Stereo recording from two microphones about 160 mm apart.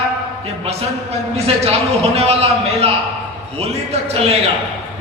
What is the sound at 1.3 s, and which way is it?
A man's voice, 40° right (ahead or behind).